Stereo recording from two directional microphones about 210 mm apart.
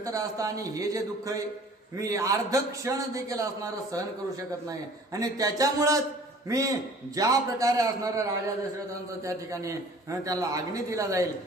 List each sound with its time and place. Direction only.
0.0 s a man's voice: 15° right (ahead or behind)